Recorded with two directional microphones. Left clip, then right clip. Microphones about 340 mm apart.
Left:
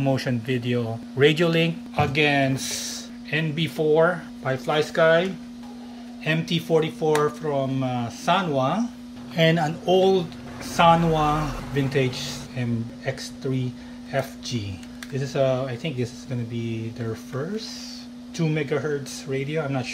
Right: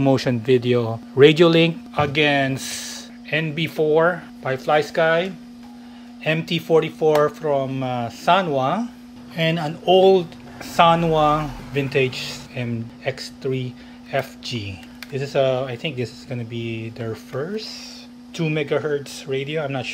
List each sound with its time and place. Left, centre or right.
0.0 s speech: centre